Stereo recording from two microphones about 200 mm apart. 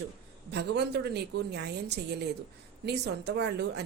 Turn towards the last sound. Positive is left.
turn(degrees=-55)  # may be behind; listen again after turning